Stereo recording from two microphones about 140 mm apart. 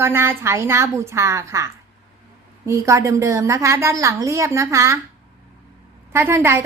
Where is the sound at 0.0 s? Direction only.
15° right (ahead or behind).